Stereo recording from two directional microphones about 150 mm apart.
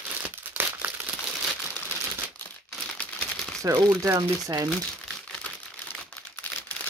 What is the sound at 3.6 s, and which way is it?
Speech, 20° right (ahead or behind).